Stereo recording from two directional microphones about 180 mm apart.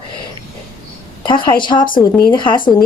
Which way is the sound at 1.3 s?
25° left (ahead or behind).